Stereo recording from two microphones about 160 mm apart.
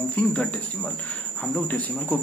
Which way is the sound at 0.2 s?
10° left (ahead or behind).